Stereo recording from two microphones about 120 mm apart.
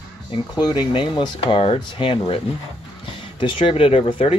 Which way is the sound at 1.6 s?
50° left (ahead or behind).